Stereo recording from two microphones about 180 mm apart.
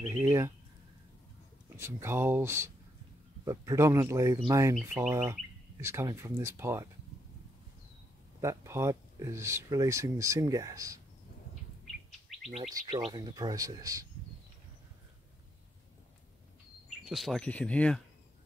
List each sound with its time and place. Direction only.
0.1 s speech: 15° right (ahead or behind)
1.8 s speech: 15° right (ahead or behind)
8.4 s speech: 15° right (ahead or behind)
12.4 s chirp tone: 30° right (ahead or behind)
12.8 s speech: 25° right (ahead or behind)
17.0 s speech: centre (ahead or behind)